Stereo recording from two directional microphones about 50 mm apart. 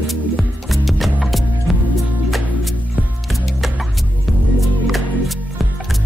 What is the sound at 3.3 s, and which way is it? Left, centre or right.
Music, centre.